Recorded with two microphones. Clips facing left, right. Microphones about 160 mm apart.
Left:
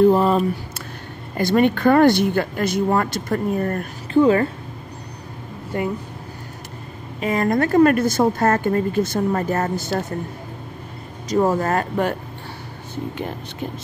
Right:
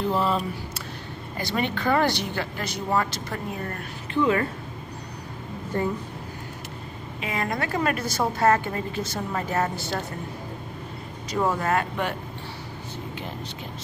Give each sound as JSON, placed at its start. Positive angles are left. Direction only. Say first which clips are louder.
{"t": 0.0, "sound": "a sound", "louder": "left 9 dB", "side_deg": 50}
{"t": 1.3, "sound": "speech", "louder": "left 10 dB", "side_deg": 50}
{"t": 5.7, "sound": "speech", "louder": "left 2 dB", "side_deg": 15}
{"t": 7.2, "sound": "speech", "louder": "left 9 dB", "side_deg": 45}
{"t": 11.2, "sound": "speech", "louder": "left 6 dB", "side_deg": 40}